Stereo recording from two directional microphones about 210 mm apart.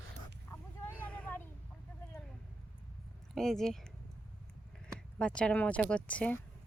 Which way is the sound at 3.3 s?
Centre (ahead or behind).